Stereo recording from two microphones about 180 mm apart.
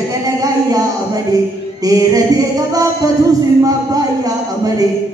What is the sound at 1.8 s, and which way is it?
Speech, 20° right (ahead or behind).